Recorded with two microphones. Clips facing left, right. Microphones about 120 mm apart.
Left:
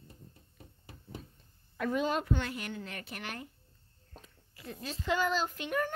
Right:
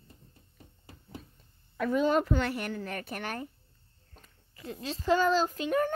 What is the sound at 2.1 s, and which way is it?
Speech, 65° right (ahead or behind).